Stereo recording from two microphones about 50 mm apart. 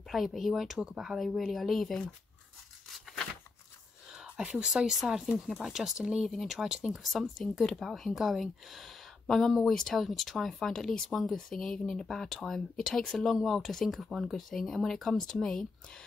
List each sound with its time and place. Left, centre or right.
0.1 s speech: centre
1.1 s speech: centre
2.9 s a sound: centre
4.4 s speech: right
4.6 s speech: centre
11.1 s speech: centre
11.3 s speech: centre
13.8 s speech: centre